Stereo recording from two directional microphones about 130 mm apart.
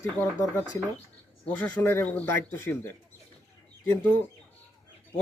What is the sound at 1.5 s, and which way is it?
Speech, 15° left (ahead or behind).